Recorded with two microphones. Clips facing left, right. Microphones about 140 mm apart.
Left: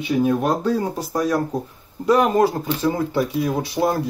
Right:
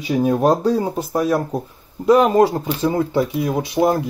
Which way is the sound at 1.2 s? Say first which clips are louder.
Right 1 dB; 10° right (ahead or behind).